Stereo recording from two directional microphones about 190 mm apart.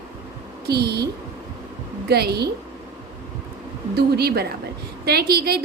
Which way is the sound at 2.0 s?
55° right (ahead or behind).